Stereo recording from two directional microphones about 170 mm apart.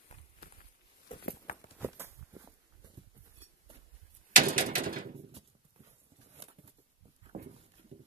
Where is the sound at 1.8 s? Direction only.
15° right (ahead or behind).